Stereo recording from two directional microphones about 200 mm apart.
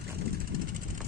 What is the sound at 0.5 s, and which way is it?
Vehicle, 45° right (ahead or behind).